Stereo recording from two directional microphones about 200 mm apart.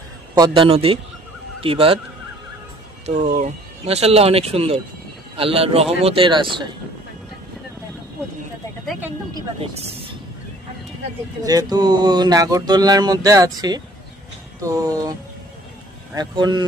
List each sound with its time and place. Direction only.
0.3 s speech: 25° right (ahead or behind)
3.3 s speech: 30° right (ahead or behind)
11.4 s speech: 20° right (ahead or behind)
14.6 s music: 15° right (ahead or behind)
16.2 s speech: 20° right (ahead or behind)